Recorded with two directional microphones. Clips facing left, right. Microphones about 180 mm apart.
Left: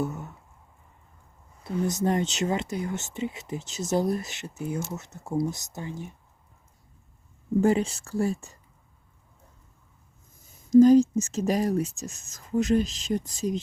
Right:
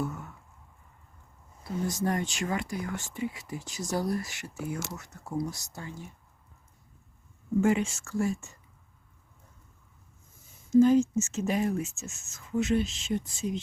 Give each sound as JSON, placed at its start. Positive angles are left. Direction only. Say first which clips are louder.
{"t": 0.0, "sound": "a sound", "louder": "left 3 dB", "side_deg": 20}
{"t": 1.6, "sound": "speech", "louder": "left 4 dB", "side_deg": 20}
{"t": 7.6, "sound": "speech", "louder": "left 3 dB", "side_deg": 35}
{"t": 10.7, "sound": "speech", "louder": "left 5 dB", "side_deg": 40}